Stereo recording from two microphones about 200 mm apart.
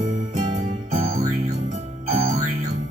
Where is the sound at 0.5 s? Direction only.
35° right (ahead or behind).